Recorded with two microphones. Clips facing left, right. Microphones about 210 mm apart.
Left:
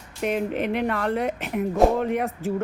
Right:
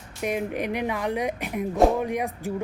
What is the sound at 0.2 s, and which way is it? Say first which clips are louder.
Speech: left 3 dB; 10° right (ahead or behind).